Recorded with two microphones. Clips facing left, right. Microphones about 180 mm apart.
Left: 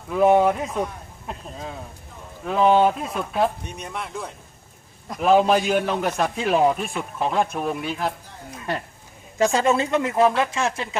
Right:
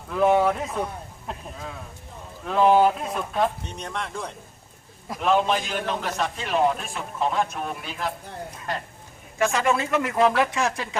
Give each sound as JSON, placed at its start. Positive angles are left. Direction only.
{"t": 0.1, "sound": "a man's voice", "side_deg": 5}
{"t": 9.5, "sound": "speech", "side_deg": 25}